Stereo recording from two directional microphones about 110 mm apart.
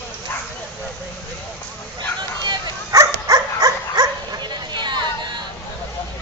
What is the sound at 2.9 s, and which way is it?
Dog, 35° right (ahead or behind).